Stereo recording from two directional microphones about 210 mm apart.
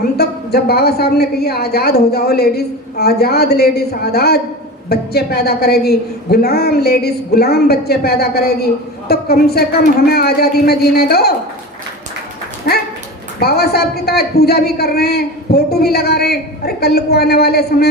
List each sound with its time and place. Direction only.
0.2 s a man's voice: 50° left (ahead or behind)
13.4 s a man's voice: 50° left (ahead or behind)